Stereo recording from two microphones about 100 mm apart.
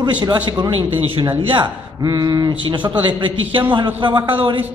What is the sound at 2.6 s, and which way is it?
A man's voice, 50° right (ahead or behind).